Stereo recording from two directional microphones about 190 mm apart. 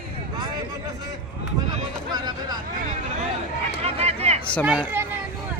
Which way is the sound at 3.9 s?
35° right (ahead or behind).